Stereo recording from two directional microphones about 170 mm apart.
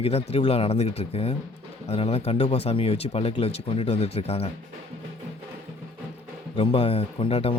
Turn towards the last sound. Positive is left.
turn(degrees=35)  # may be behind; listen again after turning